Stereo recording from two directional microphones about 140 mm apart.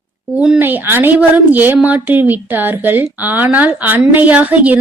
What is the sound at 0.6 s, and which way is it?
Speech, 15° right (ahead or behind).